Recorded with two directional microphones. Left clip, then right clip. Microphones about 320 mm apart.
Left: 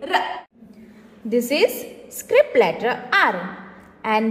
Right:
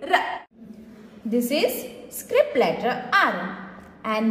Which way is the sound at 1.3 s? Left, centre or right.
Left.